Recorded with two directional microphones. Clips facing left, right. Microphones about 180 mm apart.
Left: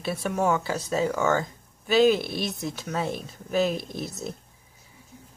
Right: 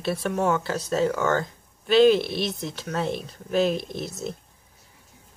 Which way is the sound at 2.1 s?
50° left (ahead or behind).